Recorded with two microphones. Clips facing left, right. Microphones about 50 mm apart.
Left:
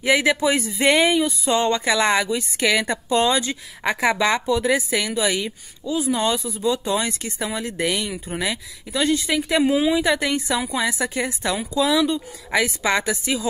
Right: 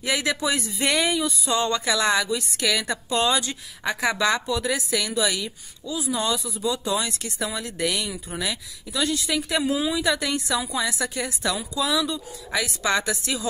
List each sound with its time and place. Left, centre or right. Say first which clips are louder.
0.0 s speech: left 6 dB; left